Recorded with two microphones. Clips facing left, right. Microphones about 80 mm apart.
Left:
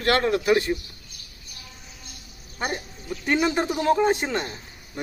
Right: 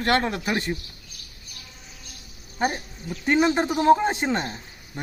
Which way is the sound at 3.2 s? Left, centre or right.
Right.